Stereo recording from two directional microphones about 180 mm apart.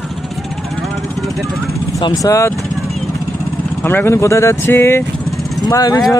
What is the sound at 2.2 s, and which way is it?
Speech, 15° left (ahead or behind).